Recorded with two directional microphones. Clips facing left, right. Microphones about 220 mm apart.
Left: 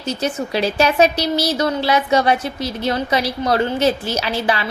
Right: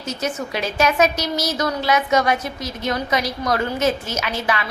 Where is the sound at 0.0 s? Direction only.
30° left (ahead or behind).